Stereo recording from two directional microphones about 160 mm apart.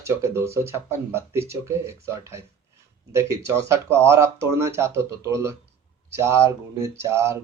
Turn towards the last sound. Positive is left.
turn(degrees=-15)  # may be behind; listen again after turning